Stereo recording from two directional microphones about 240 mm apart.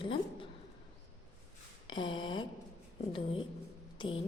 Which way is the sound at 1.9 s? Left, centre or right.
Centre.